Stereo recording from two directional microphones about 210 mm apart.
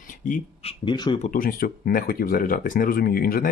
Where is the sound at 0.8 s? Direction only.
20° left (ahead or behind).